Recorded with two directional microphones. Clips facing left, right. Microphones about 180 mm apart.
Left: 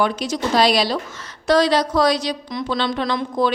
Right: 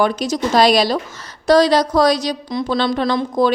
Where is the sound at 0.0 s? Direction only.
40° right (ahead or behind).